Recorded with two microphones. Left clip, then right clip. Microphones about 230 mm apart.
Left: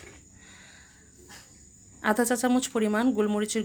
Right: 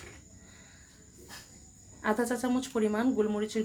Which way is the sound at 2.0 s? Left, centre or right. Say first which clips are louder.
Left 5 dB; left.